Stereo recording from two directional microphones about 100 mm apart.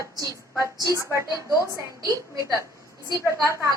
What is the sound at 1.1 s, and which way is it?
A woman's voice, 35° right (ahead or behind).